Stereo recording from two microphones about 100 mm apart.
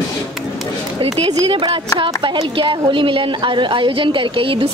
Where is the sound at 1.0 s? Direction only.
70° right (ahead or behind).